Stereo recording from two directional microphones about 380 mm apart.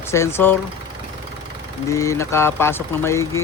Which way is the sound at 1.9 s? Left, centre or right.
Centre.